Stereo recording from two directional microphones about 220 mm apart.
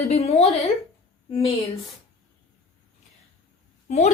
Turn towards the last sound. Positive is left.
turn(degrees=30)  # may be behind; listen again after turning